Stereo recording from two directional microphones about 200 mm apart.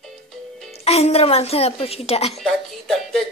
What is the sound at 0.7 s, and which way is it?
A woman's voice, 30° left (ahead or behind).